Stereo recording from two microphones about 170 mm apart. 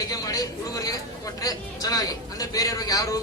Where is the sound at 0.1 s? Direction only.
20° left (ahead or behind).